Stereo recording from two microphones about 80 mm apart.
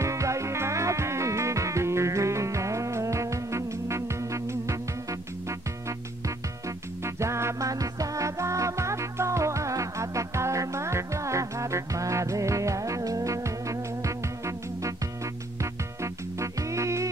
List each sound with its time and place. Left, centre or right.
0.0 s music: right
7.2 s music: right